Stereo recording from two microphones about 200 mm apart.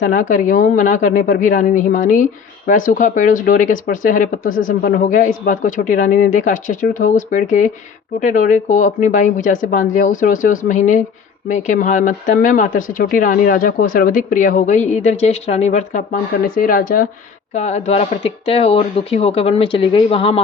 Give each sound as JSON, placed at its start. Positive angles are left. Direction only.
{"t": 0.0, "sound": "speech", "side_deg": 40}